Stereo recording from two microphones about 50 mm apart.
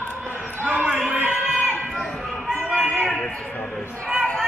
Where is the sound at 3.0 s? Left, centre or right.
Centre.